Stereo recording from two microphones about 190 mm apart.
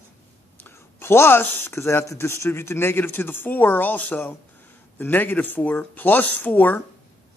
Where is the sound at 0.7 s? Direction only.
10° left (ahead or behind).